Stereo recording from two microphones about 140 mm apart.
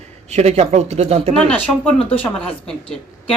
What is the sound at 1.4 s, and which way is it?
Speech, 10° left (ahead or behind).